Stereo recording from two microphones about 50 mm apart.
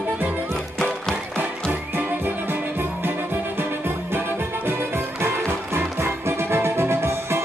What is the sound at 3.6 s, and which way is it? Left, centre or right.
Music, right.